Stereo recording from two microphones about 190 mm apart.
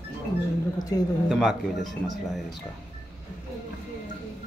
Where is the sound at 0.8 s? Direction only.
20° left (ahead or behind).